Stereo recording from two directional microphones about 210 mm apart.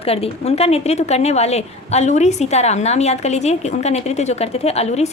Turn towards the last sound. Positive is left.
turn(degrees=30)  # may be behind; listen again after turning